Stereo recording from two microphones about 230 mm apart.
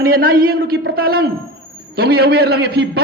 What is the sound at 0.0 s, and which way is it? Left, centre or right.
A man's voice, right.